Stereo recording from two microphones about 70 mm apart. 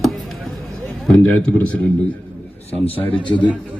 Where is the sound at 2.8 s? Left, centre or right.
Left.